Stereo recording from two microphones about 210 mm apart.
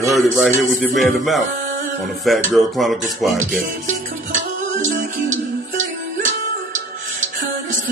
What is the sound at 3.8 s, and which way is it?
Music, 35° right (ahead or behind).